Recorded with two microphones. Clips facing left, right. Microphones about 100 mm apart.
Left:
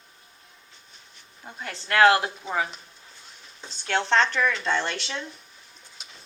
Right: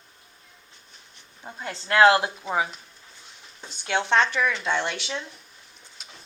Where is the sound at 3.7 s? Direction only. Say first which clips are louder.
Even; 15° right (ahead or behind).